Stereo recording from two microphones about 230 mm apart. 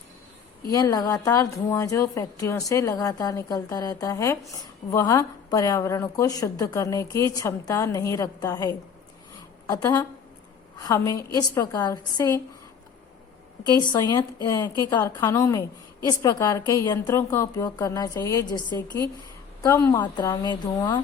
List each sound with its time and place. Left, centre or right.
0.7 s a woman's voice: centre
13.7 s a woman's voice: centre